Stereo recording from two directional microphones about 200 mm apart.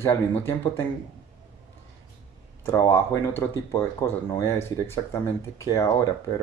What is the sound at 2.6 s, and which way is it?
Speech, 15° left (ahead or behind).